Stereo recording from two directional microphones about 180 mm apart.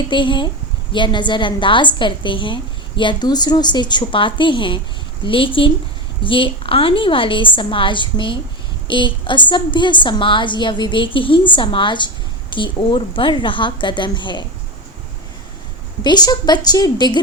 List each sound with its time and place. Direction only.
0.1 s a woman's voice: 25° left (ahead or behind)
16.0 s a woman's voice: 25° left (ahead or behind)